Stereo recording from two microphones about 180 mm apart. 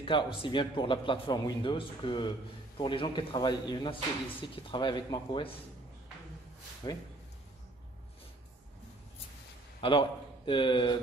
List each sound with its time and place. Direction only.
0.0 s a man's voice: 30° left (ahead or behind)
6.8 s a man's voice: 25° left (ahead or behind)
9.8 s a man's voice: 30° left (ahead or behind)